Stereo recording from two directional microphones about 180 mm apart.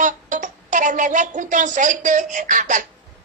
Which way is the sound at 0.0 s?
45° right (ahead or behind).